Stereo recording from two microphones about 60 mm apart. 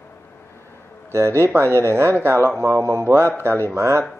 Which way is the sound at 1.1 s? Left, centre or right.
Right.